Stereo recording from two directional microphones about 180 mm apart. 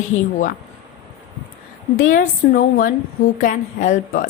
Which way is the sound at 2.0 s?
45° left (ahead or behind).